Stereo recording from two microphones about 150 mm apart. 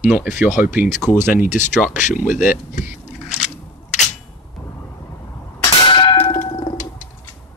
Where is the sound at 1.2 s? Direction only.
55° left (ahead or behind).